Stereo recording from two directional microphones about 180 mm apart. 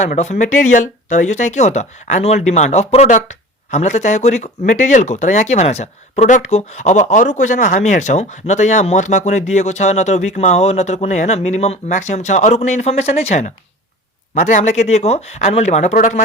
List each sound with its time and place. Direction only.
0.0 s speech: 40° left (ahead or behind)